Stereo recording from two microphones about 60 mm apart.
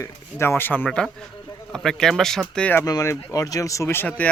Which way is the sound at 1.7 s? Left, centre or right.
Centre.